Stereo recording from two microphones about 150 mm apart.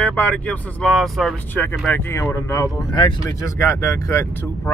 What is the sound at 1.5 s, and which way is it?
Speech, 15° left (ahead or behind).